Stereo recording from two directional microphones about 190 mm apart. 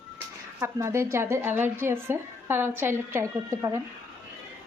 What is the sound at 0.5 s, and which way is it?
A woman's voice, 15° right (ahead or behind).